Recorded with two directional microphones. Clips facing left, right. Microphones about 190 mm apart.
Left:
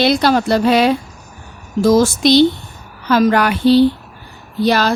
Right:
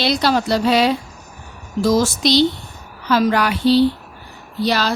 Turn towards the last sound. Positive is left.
turn(degrees=50)  # may be behind; listen again after turning